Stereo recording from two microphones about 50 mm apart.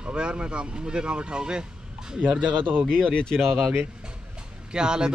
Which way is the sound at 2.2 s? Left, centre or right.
Right.